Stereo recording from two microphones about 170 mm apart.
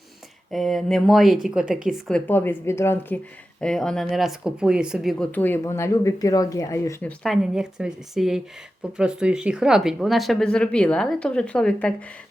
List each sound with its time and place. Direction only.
0.5 s speech: centre (ahead or behind)
5.3 s speech: 10° left (ahead or behind)
7.2 s speech: centre (ahead or behind)